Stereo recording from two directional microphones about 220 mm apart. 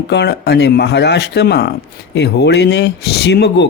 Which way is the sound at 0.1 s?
50° left (ahead or behind).